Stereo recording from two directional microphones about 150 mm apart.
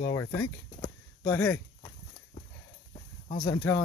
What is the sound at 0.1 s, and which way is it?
Speech, 20° left (ahead or behind).